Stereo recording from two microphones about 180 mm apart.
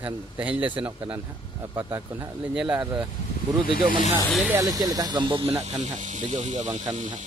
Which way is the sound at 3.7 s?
50° left (ahead or behind).